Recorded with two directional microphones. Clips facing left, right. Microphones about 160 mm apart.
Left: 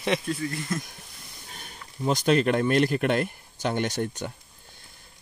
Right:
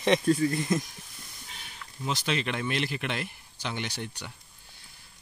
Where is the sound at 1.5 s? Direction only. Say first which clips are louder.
Left 3 dB; 45° left (ahead or behind).